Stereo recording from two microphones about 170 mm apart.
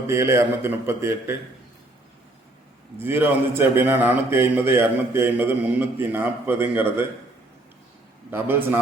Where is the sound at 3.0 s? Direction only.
10° right (ahead or behind).